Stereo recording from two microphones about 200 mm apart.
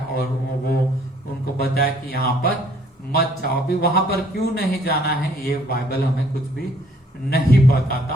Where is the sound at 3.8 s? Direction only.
50° left (ahead or behind).